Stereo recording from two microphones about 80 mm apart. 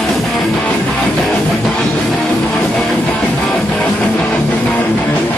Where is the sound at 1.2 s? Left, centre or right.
Centre.